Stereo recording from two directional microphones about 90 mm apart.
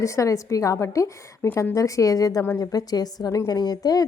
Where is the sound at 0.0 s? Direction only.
35° left (ahead or behind).